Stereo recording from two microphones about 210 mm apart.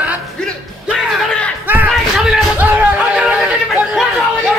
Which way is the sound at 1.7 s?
5° right (ahead or behind).